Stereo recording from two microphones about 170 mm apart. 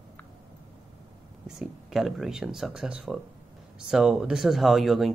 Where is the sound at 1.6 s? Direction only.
Centre (ahead or behind).